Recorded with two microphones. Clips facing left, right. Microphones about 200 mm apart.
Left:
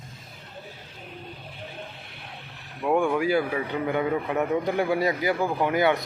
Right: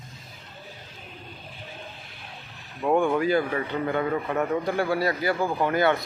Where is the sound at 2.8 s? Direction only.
5° left (ahead or behind).